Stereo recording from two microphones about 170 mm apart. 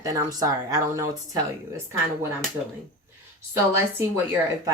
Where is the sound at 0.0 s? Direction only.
20° right (ahead or behind).